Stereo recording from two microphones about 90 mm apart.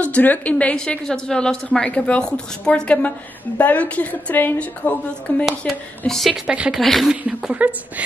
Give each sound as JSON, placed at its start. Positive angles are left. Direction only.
{"t": 0.0, "sound": "a woman's voice", "side_deg": 15}
{"t": 5.6, "sound": "a woman's voice", "side_deg": 5}
{"t": 6.4, "sound": "a woman's voice", "side_deg": -10}
{"t": 6.8, "sound": "a woman's voice", "side_deg": 0}